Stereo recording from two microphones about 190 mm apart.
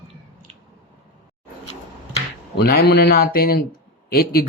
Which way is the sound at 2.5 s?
55° left (ahead or behind).